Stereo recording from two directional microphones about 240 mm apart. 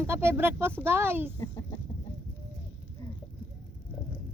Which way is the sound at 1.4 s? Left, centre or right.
Centre.